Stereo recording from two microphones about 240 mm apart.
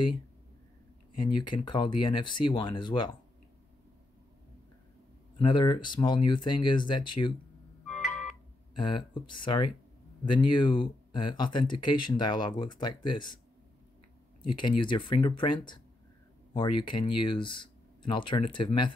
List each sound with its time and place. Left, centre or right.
1.1 s speech: centre
5.4 s speech: centre
7.8 s a sound: centre
8.7 s speech: centre
14.6 s speech: centre
16.8 s speech: centre